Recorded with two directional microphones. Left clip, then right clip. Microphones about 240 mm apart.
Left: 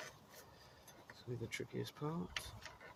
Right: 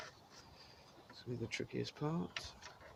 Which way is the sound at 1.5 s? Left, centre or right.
Right.